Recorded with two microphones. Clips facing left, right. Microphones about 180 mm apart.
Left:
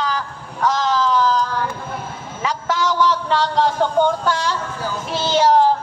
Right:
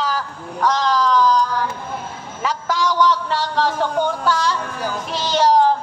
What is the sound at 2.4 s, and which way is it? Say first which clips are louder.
Speech: even; centre (ahead or behind).